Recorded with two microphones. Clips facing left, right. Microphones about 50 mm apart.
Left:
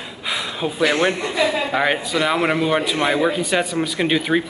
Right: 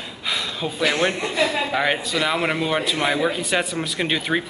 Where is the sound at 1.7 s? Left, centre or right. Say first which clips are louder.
Left 2 dB; centre.